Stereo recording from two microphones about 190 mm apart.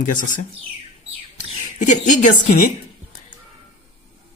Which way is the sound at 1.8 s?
40° left (ahead or behind).